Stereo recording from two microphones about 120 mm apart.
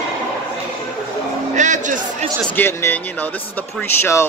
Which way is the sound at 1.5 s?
90° right.